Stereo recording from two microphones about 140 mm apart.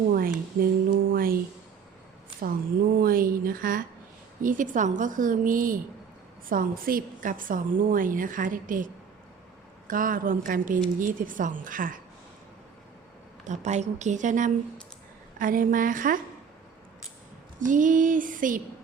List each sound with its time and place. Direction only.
0.1 s speech: 90° right
3.0 s a woman's voice: 90° right
4.4 s a woman's voice: 70° right (ahead or behind)
13.4 s a woman's voice: 55° right (ahead or behind)
15.4 s a woman's voice: 75° right (ahead or behind)
17.6 s a woman's voice: 70° right (ahead or behind)